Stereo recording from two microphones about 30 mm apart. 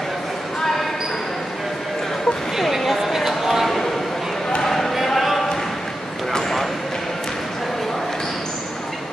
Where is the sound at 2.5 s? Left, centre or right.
Centre.